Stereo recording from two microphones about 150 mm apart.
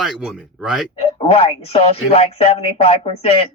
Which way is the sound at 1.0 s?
40° left (ahead or behind).